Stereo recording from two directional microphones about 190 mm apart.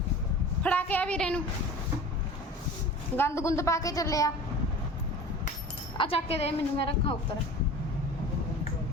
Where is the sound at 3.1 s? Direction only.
15° left (ahead or behind).